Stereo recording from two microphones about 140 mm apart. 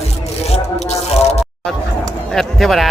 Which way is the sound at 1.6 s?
5° left (ahead or behind).